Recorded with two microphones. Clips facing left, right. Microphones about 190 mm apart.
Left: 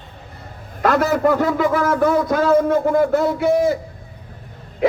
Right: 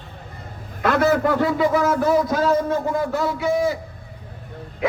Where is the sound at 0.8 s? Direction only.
45° left (ahead or behind).